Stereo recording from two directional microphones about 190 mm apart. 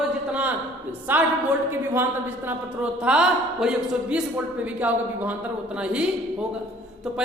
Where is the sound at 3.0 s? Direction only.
5° right (ahead or behind).